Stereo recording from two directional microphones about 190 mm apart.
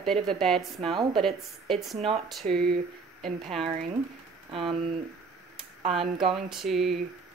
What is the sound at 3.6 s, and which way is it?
Speech, 35° right (ahead or behind).